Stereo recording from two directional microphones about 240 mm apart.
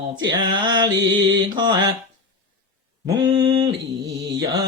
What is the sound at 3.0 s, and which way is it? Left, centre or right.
Mantra, centre.